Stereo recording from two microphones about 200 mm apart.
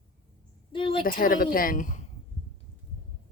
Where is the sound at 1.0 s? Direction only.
45° left (ahead or behind).